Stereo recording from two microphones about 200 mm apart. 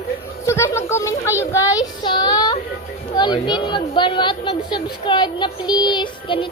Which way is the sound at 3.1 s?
20° left (ahead or behind).